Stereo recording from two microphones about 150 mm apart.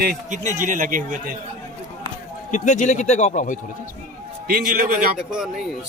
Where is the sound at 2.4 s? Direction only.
55° left (ahead or behind).